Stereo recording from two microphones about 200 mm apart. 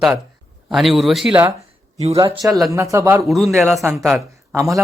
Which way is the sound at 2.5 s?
Centre (ahead or behind).